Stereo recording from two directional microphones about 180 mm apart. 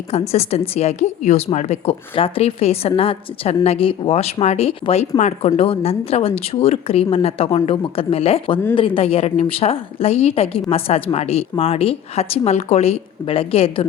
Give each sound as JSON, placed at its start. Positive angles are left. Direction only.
{"t": 0.1, "sound": "a woman's voice", "side_deg": 35}